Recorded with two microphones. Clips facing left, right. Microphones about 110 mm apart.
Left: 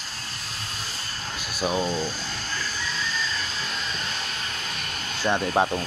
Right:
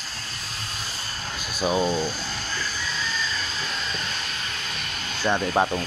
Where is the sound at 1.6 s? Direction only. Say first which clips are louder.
Right 2 dB; 10° right (ahead or behind).